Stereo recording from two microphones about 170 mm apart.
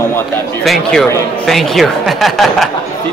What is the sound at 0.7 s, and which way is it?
A woman's voice, centre (ahead or behind).